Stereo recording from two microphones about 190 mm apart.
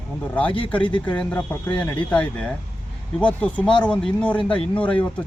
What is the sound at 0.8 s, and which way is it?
Speech, 25° left (ahead or behind).